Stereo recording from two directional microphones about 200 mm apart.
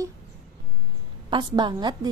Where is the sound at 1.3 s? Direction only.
25° right (ahead or behind).